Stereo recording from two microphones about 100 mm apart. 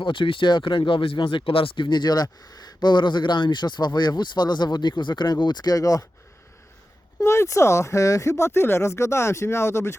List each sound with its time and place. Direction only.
0.0 s speech: 60° left (ahead or behind); by 6.1 s 35° left (ahead or behind)
7.2 s speech: 30° left (ahead or behind)